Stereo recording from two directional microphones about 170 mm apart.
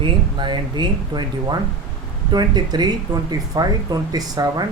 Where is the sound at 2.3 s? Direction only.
25° right (ahead or behind).